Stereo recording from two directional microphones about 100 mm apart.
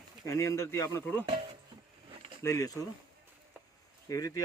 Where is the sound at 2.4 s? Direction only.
30° left (ahead or behind).